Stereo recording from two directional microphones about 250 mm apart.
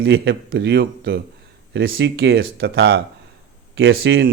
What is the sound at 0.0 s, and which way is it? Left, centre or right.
Speech, right.